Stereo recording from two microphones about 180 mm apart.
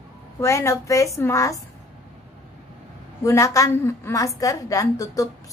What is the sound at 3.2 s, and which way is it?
A woman's voice, 15° left (ahead or behind).